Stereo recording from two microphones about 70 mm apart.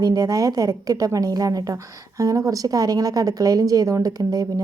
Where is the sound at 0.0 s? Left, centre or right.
Right.